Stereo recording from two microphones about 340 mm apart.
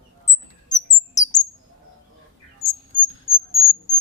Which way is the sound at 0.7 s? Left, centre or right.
Left.